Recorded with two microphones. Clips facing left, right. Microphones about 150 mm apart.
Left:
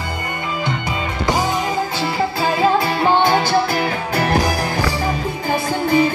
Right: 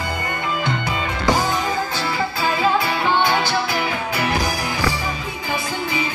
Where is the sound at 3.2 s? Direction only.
45° left (ahead or behind).